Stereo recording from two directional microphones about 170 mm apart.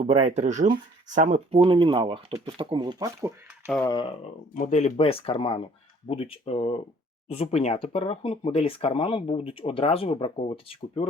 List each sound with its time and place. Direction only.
0.0 s speech: 40° right (ahead or behind); by 3.3 s 20° right (ahead or behind)
3.8 s speech: 30° left (ahead or behind)
4.5 s speech: 45° left (ahead or behind)